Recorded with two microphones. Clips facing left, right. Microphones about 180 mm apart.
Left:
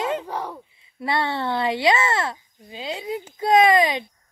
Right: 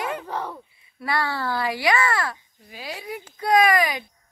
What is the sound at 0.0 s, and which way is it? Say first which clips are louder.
A child's voice: left 3 dB; 20° left (ahead or behind).